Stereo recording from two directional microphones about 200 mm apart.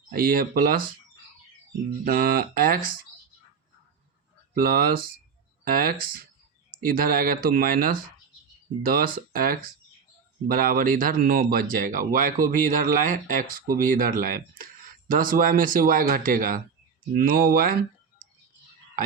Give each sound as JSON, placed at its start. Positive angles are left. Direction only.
{"t": 0.1, "sound": "speech", "side_deg": -45}
{"t": 2.0, "sound": "speech", "side_deg": -45}
{"t": 4.5, "sound": "speech", "side_deg": -45}